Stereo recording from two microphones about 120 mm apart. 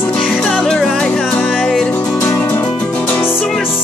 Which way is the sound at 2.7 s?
15° left (ahead or behind).